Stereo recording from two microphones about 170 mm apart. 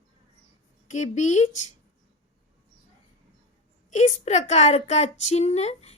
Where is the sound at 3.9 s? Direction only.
40° left (ahead or behind).